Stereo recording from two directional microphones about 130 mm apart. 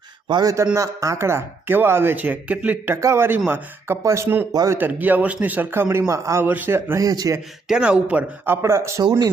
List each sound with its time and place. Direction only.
0.3 s a man's voice: 30° right (ahead or behind)
4.8 s a man's voice: 15° right (ahead or behind)
7.7 s a man's voice: 5° right (ahead or behind)